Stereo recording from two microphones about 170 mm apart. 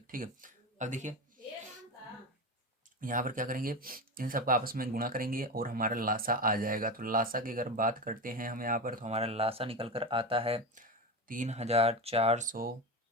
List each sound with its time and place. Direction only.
0.1 s speech: 55° right (ahead or behind)
3.0 s speech: 50° right (ahead or behind)
9.1 s speech: 35° right (ahead or behind)
11.3 s speech: 45° right (ahead or behind)